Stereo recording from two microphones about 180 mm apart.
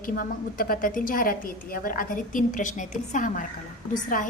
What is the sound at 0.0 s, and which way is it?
A woman's voice, 50° left (ahead or behind).